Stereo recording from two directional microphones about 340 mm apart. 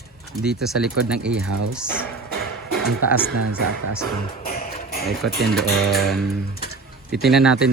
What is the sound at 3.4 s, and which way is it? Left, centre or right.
Speech, right.